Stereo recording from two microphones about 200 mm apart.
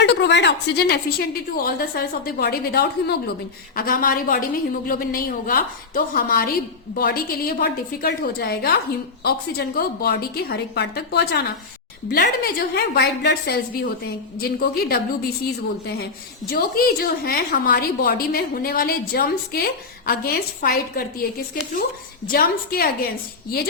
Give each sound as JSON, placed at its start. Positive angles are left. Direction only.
{"t": 0.0, "sound": "a woman's voice", "side_deg": 60}
{"t": 16.5, "sound": "a woman's voice", "side_deg": 50}